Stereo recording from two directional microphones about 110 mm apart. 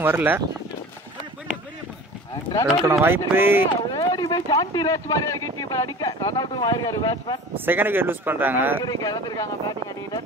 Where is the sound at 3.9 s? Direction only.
35° left (ahead or behind).